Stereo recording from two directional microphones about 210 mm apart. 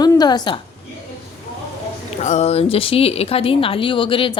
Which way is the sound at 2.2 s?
30° left (ahead or behind).